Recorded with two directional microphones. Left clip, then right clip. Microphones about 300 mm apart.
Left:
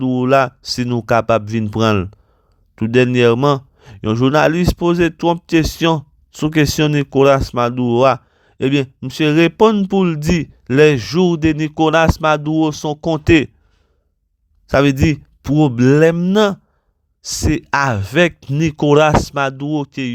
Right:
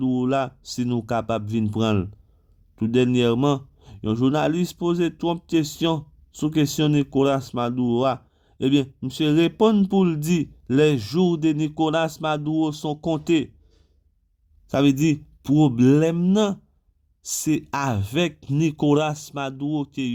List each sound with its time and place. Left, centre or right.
0.0 s speech: left
14.7 s speech: left